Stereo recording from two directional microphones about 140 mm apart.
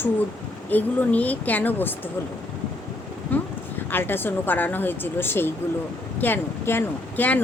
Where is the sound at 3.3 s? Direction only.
15° left (ahead or behind).